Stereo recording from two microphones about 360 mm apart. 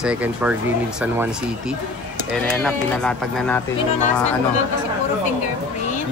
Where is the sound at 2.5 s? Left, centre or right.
Centre.